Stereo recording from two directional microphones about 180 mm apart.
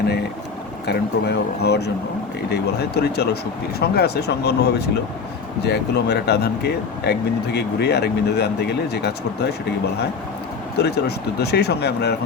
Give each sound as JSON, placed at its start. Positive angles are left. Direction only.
{"t": 0.9, "sound": "speech", "side_deg": 65}
{"t": 10.8, "sound": "speech", "side_deg": 65}